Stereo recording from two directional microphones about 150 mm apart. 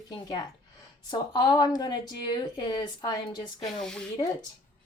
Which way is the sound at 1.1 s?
30° left (ahead or behind).